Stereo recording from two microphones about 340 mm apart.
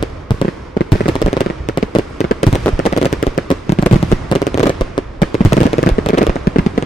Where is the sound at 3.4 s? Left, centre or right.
Centre.